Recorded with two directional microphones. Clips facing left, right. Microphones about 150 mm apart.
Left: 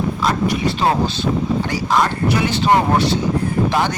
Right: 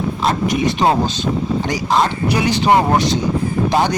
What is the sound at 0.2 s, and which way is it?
Speech, 20° right (ahead or behind).